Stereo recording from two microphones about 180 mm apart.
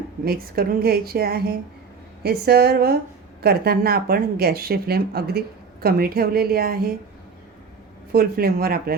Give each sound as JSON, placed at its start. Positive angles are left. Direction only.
{"t": 0.3, "sound": "speech", "side_deg": -55}
{"t": 8.1, "sound": "speech", "side_deg": -55}